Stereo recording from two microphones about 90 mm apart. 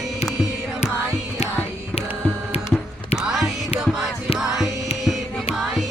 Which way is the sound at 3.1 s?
5° right (ahead or behind).